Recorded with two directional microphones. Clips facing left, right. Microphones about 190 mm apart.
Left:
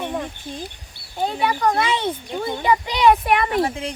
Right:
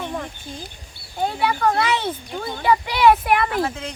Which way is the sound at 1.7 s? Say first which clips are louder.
Even; 20° left (ahead or behind).